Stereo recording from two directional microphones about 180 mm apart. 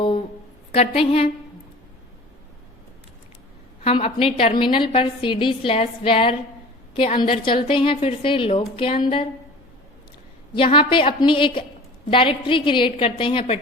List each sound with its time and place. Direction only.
0.7 s a woman's voice: 30° left (ahead or behind)
3.8 s a woman's voice: 35° left (ahead or behind)
10.5 s a woman's voice: 30° left (ahead or behind)